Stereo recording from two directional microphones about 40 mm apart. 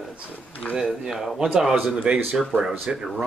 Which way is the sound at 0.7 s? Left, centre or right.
Centre.